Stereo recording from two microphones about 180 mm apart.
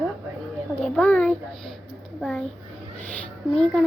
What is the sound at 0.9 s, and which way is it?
A woman's voice, 5° left (ahead or behind).